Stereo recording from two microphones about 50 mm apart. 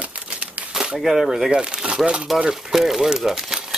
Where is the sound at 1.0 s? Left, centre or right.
Centre.